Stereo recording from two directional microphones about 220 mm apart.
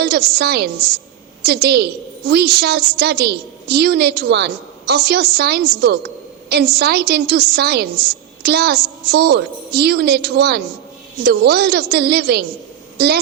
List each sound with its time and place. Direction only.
0.0 s a woman's voice: 45° right (ahead or behind)